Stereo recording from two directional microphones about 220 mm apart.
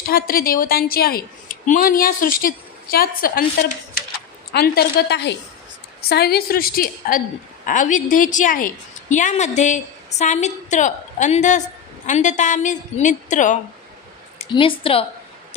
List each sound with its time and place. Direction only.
0.1 s a woman's voice: 40° left (ahead or behind)
14.5 s a woman's voice: 25° left (ahead or behind)